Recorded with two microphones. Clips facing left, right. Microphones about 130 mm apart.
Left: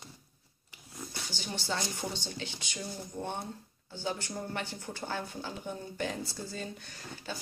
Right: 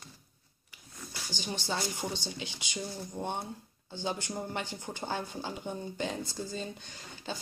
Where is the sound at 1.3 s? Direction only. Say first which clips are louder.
Right 1 dB; 15° right (ahead or behind).